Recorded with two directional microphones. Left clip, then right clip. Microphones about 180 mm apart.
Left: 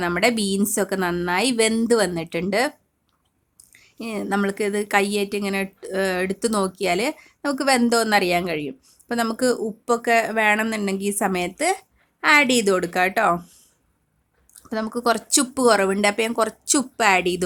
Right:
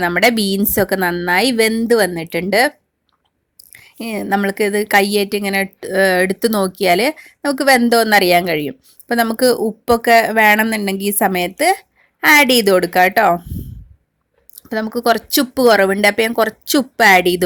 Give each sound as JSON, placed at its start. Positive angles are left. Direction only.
{"t": 0.0, "sound": "a woman's voice", "side_deg": -25}
{"t": 3.6, "sound": "a sound", "side_deg": -25}
{"t": 4.4, "sound": "a woman's voice", "side_deg": -20}
{"t": 14.5, "sound": "speech", "side_deg": -20}